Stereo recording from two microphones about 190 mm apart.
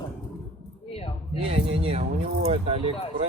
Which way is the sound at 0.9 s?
30° left (ahead or behind).